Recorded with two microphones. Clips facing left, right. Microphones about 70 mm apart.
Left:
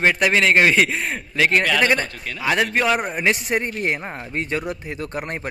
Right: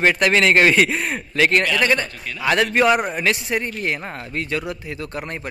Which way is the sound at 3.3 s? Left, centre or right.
Left.